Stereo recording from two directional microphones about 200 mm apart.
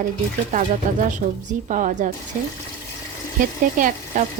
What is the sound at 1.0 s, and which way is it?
Speech, 40° right (ahead or behind).